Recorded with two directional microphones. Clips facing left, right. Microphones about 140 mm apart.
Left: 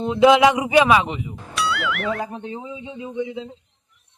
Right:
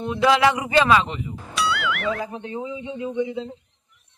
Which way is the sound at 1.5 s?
Centre (ahead or behind).